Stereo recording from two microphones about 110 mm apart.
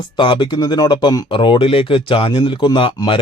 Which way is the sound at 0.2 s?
45° left (ahead or behind).